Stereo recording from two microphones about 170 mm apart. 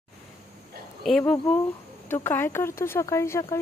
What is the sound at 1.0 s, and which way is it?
Speech, 5° left (ahead or behind).